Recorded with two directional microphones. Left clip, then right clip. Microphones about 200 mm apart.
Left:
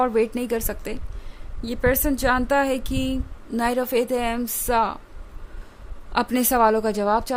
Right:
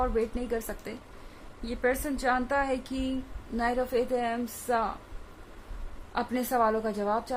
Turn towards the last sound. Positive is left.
turn(degrees=50)  # may be behind; listen again after turning